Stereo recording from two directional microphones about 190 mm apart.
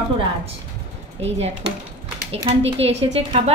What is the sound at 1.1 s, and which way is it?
A child's voice, 35° right (ahead or behind).